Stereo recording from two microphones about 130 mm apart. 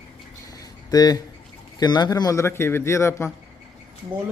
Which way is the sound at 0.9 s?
30° left (ahead or behind).